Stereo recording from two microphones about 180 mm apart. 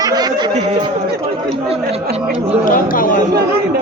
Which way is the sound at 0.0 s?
20° right (ahead or behind).